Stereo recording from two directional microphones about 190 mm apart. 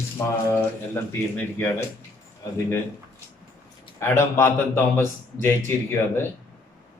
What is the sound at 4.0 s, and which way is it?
Speech, 15° left (ahead or behind).